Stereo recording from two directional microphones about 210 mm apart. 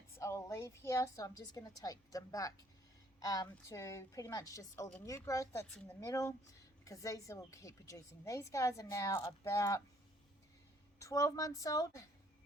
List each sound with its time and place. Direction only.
0.2 s a woman's voice: 15° left (ahead or behind)
11.0 s a woman's voice: 15° left (ahead or behind)